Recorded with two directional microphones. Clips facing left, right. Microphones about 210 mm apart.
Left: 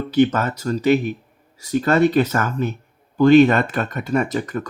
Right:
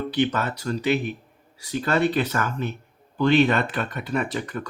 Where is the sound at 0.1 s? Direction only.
45° left (ahead or behind).